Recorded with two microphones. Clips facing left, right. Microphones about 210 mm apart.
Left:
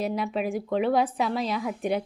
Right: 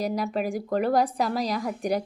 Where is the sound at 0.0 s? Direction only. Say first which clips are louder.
Right 1 dB; centre (ahead or behind).